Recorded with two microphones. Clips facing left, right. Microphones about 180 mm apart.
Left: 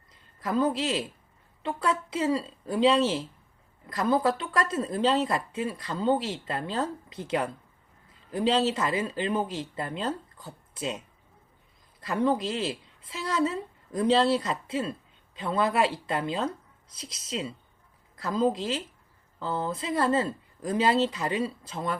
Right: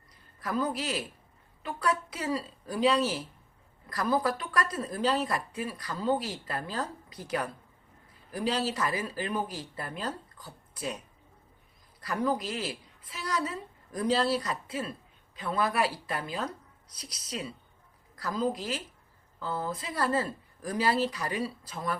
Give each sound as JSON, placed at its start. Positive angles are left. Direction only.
{"t": 0.1, "sound": "a woman's voice", "side_deg": 25}